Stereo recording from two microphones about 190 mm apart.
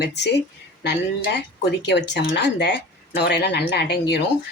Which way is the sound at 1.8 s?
65° left (ahead or behind).